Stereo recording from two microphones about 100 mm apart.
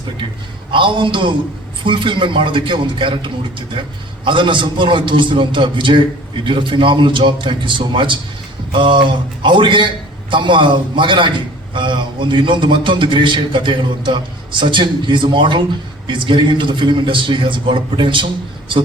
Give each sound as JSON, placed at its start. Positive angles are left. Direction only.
{"t": 0.7, "sound": "a man's voice", "side_deg": -55}